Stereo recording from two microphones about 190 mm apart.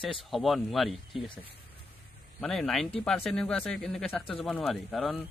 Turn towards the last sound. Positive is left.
turn(degrees=5)  # may be behind; listen again after turning